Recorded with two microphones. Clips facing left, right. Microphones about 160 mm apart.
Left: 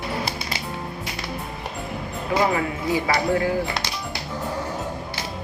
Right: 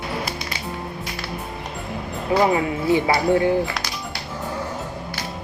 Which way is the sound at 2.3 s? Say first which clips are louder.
Right 3 dB; 25° right (ahead or behind).